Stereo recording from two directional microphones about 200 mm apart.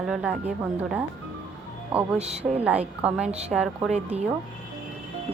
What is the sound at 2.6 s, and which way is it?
Speech, 5° right (ahead or behind).